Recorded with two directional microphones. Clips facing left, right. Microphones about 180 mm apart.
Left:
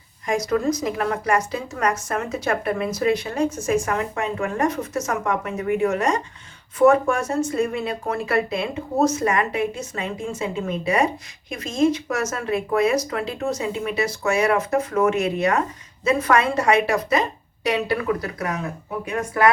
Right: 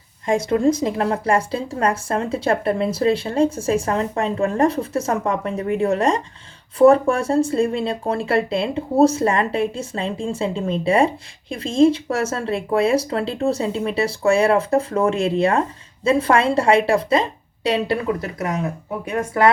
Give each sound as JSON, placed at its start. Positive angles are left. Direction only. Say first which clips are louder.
{"t": 0.3, "sound": "speech", "louder": "right 4 dB", "side_deg": -30}